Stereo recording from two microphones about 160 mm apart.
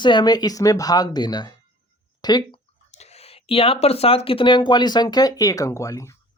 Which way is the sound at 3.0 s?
40° left (ahead or behind).